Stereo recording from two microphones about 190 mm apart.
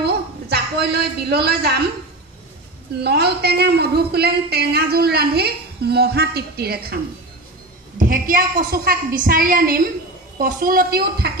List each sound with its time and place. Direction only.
0.5 s a woman's voice: 60° right (ahead or behind)
3.0 s a woman's voice: 60° right (ahead or behind)